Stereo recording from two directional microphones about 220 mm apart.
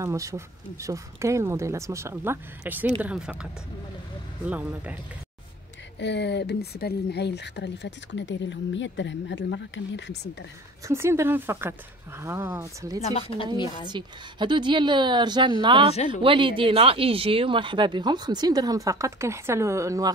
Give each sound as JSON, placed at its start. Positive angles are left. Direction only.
{"t": 0.0, "sound": "speech", "side_deg": -15}
{"t": 4.5, "sound": "speech", "side_deg": -5}
{"t": 5.9, "sound": "speech", "side_deg": 50}
{"t": 10.9, "sound": "speech", "side_deg": -10}
{"t": 13.0, "sound": "speech", "side_deg": 25}
{"t": 13.8, "sound": "speech", "side_deg": -20}